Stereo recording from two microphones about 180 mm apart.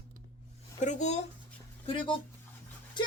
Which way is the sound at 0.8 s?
40° left (ahead or behind).